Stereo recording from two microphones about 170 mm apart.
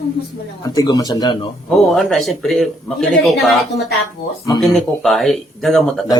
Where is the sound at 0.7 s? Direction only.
20° left (ahead or behind).